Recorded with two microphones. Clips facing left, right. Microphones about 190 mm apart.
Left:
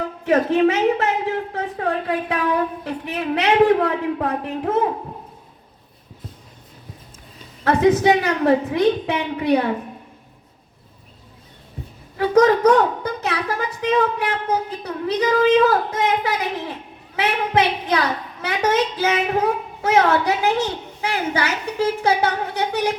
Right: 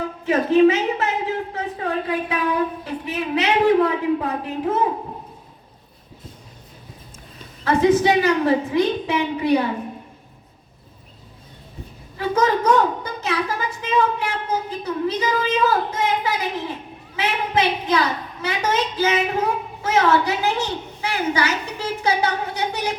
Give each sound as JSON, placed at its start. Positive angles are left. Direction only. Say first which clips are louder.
{"t": 0.3, "sound": "a woman's voice", "louder": "right 1 dB", "side_deg": 60}
{"t": 7.6, "sound": "a woman's voice", "louder": "left 1 dB", "side_deg": 60}
{"t": 12.1, "sound": "a woman's voice", "louder": "left 5 dB", "side_deg": 60}